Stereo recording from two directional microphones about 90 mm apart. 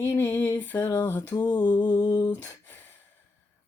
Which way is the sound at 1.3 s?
50° left (ahead or behind).